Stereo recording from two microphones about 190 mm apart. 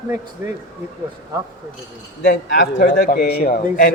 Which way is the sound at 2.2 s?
60° left (ahead or behind).